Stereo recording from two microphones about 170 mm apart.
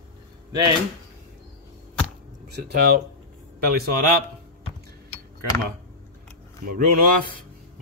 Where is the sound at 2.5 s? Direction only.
65° right (ahead or behind).